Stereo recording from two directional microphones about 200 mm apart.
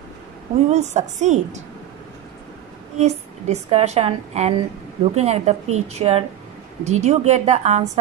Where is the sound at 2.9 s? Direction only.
35° right (ahead or behind).